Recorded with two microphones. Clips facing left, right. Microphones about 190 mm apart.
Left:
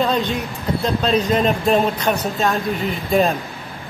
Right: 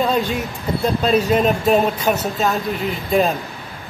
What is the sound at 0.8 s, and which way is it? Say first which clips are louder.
A man's voice: right 2 dB; 10° right (ahead or behind).